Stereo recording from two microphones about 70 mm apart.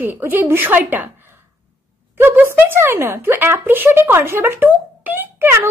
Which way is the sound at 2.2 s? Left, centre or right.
Right.